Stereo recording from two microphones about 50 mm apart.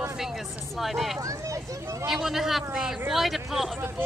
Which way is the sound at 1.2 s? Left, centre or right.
Right.